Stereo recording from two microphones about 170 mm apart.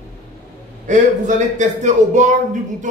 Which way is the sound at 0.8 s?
45° right (ahead or behind).